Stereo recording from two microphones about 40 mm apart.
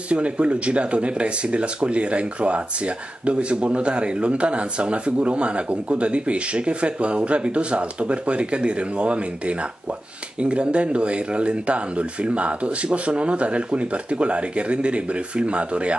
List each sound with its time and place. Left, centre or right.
0.1 s speech: right